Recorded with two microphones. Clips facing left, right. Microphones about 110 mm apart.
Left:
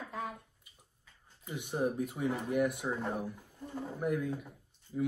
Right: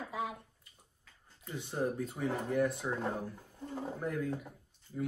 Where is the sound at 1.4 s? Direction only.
15° left (ahead or behind).